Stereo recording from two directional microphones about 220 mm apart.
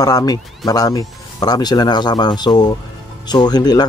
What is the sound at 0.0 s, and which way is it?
Speech, 15° left (ahead or behind).